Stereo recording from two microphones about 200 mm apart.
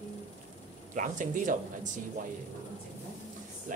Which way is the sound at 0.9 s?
40° right (ahead or behind).